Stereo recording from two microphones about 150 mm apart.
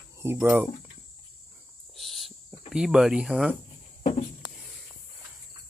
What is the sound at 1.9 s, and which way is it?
Cricket, centre (ahead or behind).